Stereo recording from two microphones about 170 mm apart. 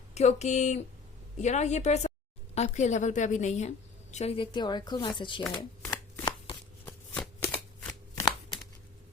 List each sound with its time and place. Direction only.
0.1 s a woman's voice: 40° left (ahead or behind)
5.5 s shuffling cards: 25° left (ahead or behind)
6.8 s shuffling cards: 10° left (ahead or behind)